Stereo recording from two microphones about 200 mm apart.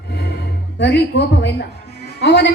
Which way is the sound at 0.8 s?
55° left (ahead or behind).